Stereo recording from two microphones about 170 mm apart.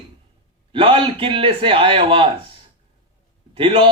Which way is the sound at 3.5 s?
35° right (ahead or behind).